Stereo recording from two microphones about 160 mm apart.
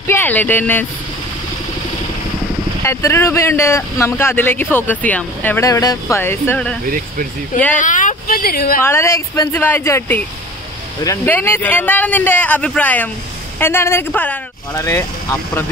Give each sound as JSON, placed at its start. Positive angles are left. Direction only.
{"t": 0.0, "sound": "speech", "side_deg": 15}
{"t": 2.8, "sound": "speech", "side_deg": 15}
{"t": 7.7, "sound": "speech", "side_deg": 55}
{"t": 8.8, "sound": "speech", "side_deg": 15}
{"t": 11.2, "sound": "speech", "side_deg": 15}